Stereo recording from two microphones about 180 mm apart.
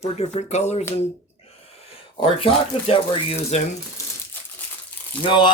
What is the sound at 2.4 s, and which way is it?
Speech, 30° left (ahead or behind).